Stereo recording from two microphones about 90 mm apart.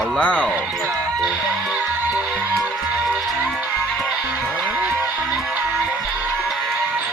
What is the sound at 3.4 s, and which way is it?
Music, 5° right (ahead or behind).